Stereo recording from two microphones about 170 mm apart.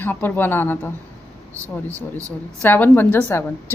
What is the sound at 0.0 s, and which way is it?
Speech, 10° left (ahead or behind).